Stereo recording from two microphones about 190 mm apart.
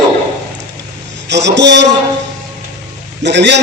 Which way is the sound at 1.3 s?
65° right (ahead or behind).